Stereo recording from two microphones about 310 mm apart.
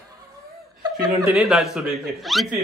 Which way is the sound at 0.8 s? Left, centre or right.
Centre.